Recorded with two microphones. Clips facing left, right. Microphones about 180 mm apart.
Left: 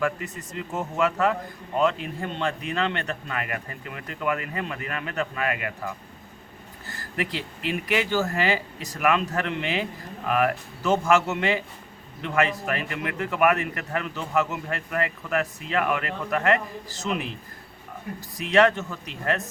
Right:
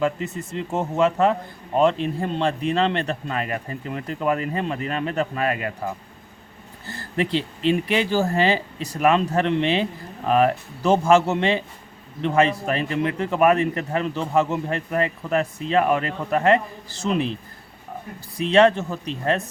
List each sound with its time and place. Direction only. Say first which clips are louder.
0.0 s a man's voice: right 4 dB; 25° right (ahead or behind)
18.3 s a man's voice: right 4 dB; 30° right (ahead or behind)